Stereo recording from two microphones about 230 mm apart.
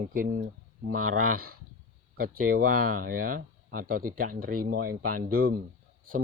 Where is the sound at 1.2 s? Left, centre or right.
Right.